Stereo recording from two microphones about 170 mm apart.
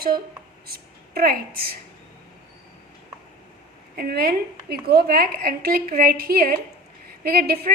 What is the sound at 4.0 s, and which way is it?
A woman's voice, 65° right (ahead or behind).